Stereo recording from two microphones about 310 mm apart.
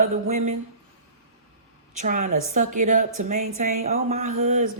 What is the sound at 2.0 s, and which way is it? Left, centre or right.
Speech, right.